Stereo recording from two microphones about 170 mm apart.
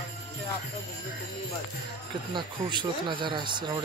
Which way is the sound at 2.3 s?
30° right (ahead or behind).